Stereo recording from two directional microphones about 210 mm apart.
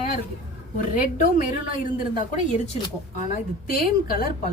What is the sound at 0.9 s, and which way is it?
A woman's voice, 40° left (ahead or behind).